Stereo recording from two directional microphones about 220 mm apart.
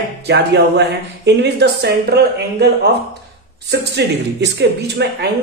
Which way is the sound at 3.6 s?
50° right (ahead or behind).